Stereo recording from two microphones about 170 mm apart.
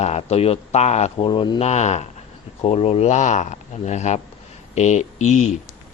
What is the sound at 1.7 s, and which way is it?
A man's voice, 40° left (ahead or behind).